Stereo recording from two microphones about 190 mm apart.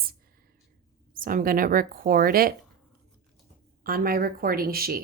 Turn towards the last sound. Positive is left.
turn(degrees=-50)  # may be behind; listen again after turning